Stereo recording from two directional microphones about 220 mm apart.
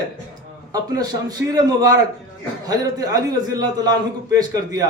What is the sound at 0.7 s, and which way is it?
A man's voice, 15° right (ahead or behind).